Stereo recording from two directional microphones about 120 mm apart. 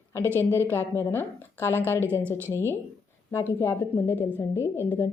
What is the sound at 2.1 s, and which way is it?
Speech, 20° right (ahead or behind).